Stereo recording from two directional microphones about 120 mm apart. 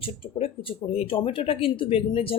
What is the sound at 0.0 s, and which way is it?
Speech, 50° left (ahead or behind).